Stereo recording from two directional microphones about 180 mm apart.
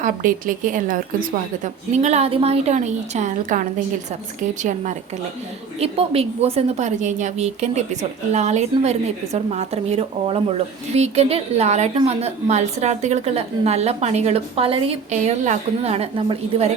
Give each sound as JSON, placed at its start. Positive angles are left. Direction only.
{"t": 0.0, "sound": "a woman's voice", "side_deg": -50}